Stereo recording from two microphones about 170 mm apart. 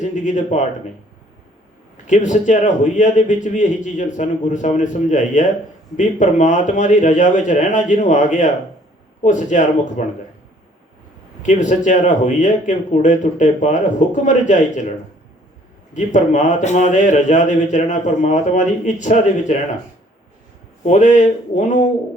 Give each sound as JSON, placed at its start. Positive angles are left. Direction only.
{"t": 0.0, "sound": "speech", "side_deg": 45}
{"t": 2.0, "sound": "speech", "side_deg": 45}
{"t": 11.4, "sound": "speech", "side_deg": 45}
{"t": 16.0, "sound": "speech", "side_deg": 45}
{"t": 20.8, "sound": "speech", "side_deg": 45}